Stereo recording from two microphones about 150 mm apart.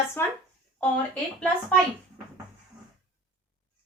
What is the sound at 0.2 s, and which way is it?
A woman's voice, 15° left (ahead or behind).